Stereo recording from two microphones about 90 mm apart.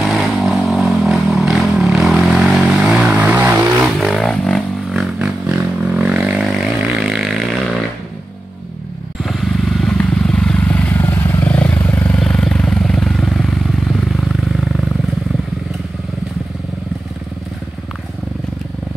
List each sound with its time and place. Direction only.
0.0 s vehicle: centre (ahead or behind); by 3.7 s 20° right (ahead or behind)
3.8 s a sound: centre (ahead or behind)
5.2 s a sound: 15° right (ahead or behind)
9.2 s vehicle: 5° left (ahead or behind)
11.0 s vehicle: 30° left (ahead or behind)
11.8 s vehicle: 30° left (ahead or behind)
12.1 s vehicle: 10° left (ahead or behind)